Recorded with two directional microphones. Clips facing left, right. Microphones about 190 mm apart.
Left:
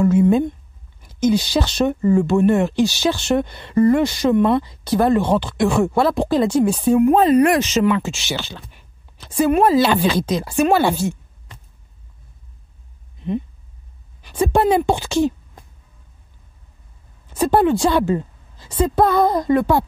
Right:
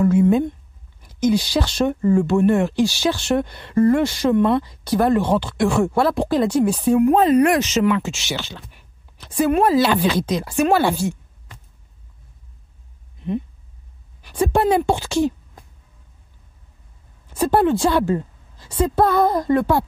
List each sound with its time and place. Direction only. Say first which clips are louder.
0.0 s speech: left 1 dB; 20° left (ahead or behind)
14.2 s speech: left 1 dB; 20° left (ahead or behind)
17.3 s a woman's voice: left 1 dB; 20° left (ahead or behind)